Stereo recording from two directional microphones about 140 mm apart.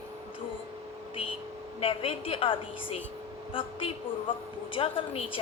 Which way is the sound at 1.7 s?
40° left (ahead or behind).